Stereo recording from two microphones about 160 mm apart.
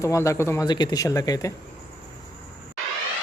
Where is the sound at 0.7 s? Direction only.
25° left (ahead or behind).